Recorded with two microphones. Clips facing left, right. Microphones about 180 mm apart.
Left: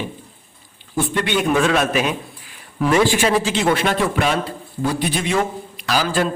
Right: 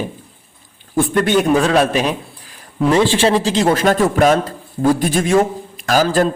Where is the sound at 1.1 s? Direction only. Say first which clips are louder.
Right 5 dB; 45° right (ahead or behind).